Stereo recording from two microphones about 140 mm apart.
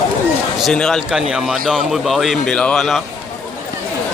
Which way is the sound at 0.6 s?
5° left (ahead or behind).